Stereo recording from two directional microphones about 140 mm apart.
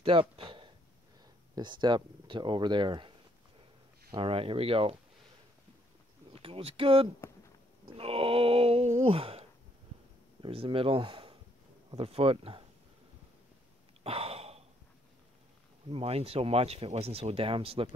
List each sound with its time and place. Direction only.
0.0 s speech: 40° right (ahead or behind)
6.3 s speech: 40° right (ahead or behind)
14.0 s gasp: 45° right (ahead or behind)
15.9 s speech: 45° right (ahead or behind)